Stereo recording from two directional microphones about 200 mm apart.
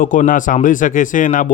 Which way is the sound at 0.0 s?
40° left (ahead or behind).